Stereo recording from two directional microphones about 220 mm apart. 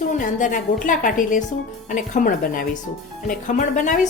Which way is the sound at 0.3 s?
35° left (ahead or behind).